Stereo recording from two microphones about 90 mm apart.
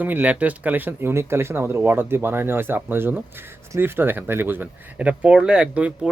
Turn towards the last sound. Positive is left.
turn(degrees=-10)  # may be behind; listen again after turning